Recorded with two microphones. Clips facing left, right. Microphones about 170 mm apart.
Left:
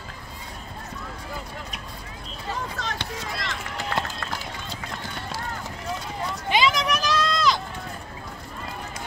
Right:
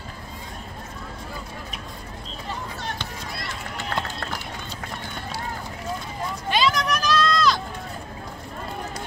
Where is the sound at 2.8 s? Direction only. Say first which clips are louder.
Left 1 dB; 90° left.